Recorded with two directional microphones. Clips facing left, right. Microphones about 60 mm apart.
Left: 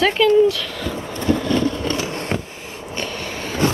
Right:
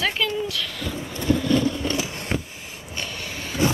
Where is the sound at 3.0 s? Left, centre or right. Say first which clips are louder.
Left 5 dB; left.